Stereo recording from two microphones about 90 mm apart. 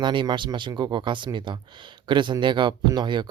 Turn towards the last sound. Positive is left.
turn(degrees=-55)  # may be behind; listen again after turning